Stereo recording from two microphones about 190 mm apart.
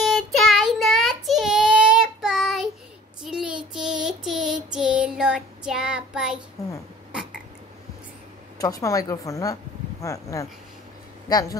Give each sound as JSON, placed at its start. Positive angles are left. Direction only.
{"t": 0.0, "sound": "child singing", "side_deg": 0}
{"t": 6.6, "sound": "a woman's voice", "side_deg": 15}
{"t": 8.5, "sound": "a woman's voice", "side_deg": 20}